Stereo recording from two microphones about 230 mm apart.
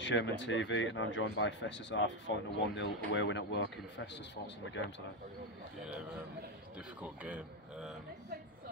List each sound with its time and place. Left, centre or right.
0.0 s speech: left
7.0 s speech: centre